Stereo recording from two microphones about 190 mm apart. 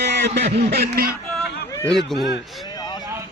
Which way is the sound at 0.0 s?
60° right (ahead or behind).